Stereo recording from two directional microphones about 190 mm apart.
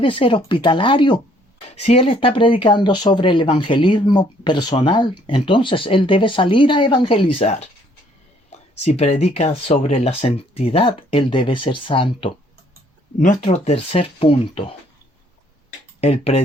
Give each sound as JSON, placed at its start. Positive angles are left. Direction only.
{"t": 0.0, "sound": "speech", "side_deg": 25}
{"t": 8.8, "sound": "speech", "side_deg": 35}
{"t": 13.1, "sound": "speech", "side_deg": 40}
{"t": 16.0, "sound": "speech", "side_deg": 30}